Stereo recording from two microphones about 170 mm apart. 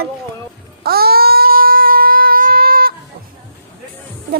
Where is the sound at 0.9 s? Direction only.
65° right (ahead or behind).